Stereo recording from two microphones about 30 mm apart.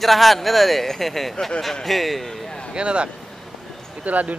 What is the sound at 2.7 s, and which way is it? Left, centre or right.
Speech, right.